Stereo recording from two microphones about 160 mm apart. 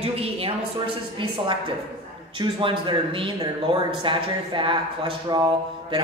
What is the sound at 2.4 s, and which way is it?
A man's voice, 30° right (ahead or behind).